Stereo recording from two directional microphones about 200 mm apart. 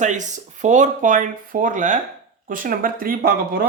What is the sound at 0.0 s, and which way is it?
Speech, 40° right (ahead or behind).